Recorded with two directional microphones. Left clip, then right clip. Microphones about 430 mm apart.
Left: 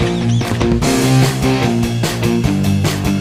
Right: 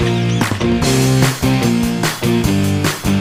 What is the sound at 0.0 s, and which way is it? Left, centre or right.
Music, centre.